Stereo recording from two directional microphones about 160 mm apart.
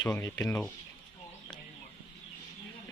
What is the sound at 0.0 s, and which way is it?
Speech, 15° left (ahead or behind).